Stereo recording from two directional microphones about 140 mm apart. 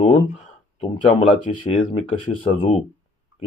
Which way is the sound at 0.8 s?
40° left (ahead or behind).